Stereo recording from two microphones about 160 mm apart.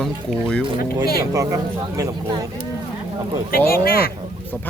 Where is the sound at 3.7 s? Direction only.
65° left (ahead or behind).